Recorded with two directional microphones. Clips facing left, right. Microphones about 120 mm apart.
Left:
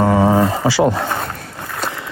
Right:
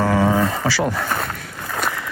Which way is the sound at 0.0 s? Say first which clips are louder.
Left 4 dB; 25° left (ahead or behind).